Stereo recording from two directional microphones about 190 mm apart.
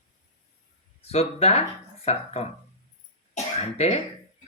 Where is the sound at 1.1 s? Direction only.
35° left (ahead or behind).